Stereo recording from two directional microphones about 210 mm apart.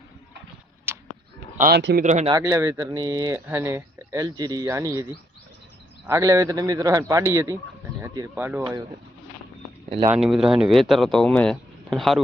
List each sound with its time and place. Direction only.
0.9 s a sound: 10° right (ahead or behind)
1.5 s speech: 40° right (ahead or behind)
2.0 s speech: 35° right (ahead or behind)
2.3 s speech: 15° right (ahead or behind)
6.1 s speech: 15° right (ahead or behind)
10.1 s speech: centre (ahead or behind)